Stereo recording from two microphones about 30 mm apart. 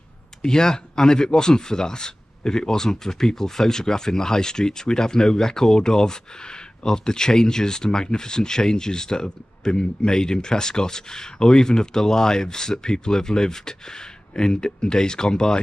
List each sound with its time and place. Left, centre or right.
0.4 s speech: left